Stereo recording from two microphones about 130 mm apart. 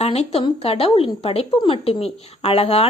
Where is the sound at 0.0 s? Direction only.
55° left (ahead or behind).